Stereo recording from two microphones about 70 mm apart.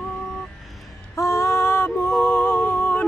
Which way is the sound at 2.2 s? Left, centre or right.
Left.